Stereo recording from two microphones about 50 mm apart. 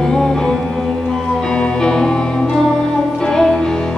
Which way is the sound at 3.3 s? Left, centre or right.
Centre.